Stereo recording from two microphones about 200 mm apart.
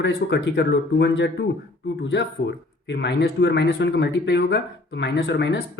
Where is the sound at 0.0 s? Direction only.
60° left (ahead or behind).